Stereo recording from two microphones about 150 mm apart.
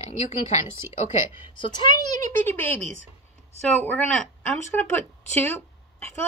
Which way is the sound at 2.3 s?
15° left (ahead or behind).